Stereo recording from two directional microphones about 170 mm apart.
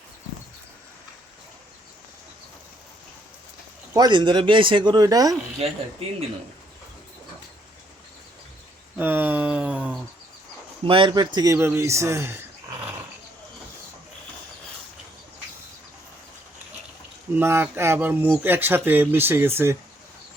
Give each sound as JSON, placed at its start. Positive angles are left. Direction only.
{"t": 3.9, "sound": "speech", "side_deg": -25}
{"t": 6.0, "sound": "speech", "side_deg": -35}
{"t": 9.0, "sound": "a sound", "side_deg": -10}
{"t": 10.8, "sound": "speech", "side_deg": -30}
{"t": 11.5, "sound": "speech", "side_deg": -15}
{"t": 17.3, "sound": "speech", "side_deg": -15}